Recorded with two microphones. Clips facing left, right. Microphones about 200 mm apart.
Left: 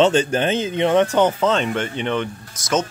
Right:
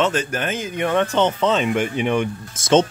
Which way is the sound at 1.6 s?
10° right (ahead or behind).